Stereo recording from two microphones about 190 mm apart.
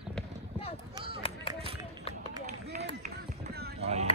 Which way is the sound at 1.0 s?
30° right (ahead or behind).